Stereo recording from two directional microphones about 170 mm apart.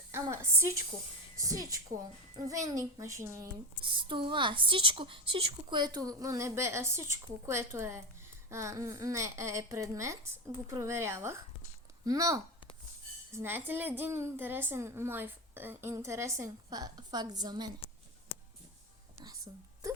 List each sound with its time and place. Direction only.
0.1 s a woman's voice: 15° right (ahead or behind)
3.8 s a woman's voice: 30° right (ahead or behind)
19.5 s a woman's voice: 25° right (ahead or behind)